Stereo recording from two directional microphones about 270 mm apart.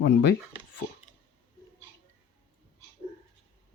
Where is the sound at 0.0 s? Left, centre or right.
Left.